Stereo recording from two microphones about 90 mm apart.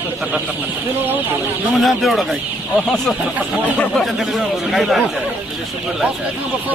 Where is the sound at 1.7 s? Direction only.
Centre (ahead or behind).